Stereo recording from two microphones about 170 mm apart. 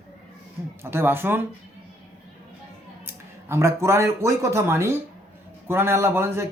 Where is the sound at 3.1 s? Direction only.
15° right (ahead or behind).